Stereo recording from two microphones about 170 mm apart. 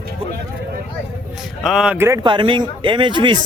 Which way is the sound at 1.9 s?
15° right (ahead or behind).